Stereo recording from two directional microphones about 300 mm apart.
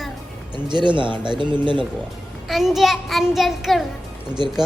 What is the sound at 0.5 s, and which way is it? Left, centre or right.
Speech, centre.